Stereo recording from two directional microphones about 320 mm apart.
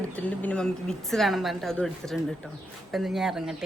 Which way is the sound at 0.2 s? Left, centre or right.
Centre.